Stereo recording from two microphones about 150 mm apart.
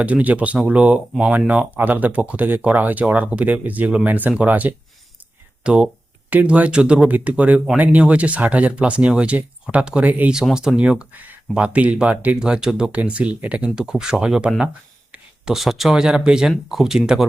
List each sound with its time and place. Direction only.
0.0 s speech: 10° right (ahead or behind)